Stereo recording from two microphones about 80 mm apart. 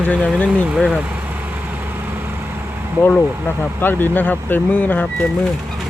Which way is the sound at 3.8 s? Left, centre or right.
Left.